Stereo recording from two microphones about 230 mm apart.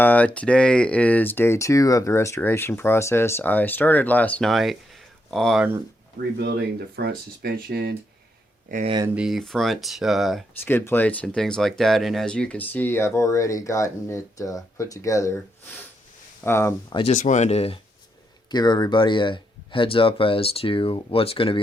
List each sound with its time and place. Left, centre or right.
0.0 s speech: centre
6.1 s speech: right
8.7 s speech: right
9.1 s speech: centre
16.4 s speech: centre
17.0 s speech: left